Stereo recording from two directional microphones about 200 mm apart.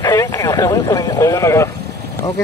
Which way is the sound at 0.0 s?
15° left (ahead or behind).